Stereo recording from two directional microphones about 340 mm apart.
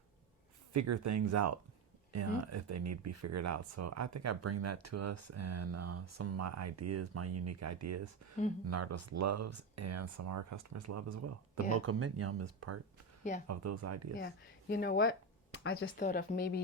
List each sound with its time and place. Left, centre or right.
0.7 s speech: right
14.2 s a woman's voice: left